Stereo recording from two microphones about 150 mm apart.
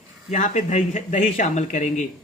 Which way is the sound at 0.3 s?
55° left (ahead or behind).